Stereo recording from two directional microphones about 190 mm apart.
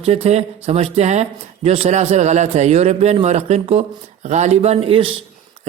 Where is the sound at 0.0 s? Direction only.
35° right (ahead or behind).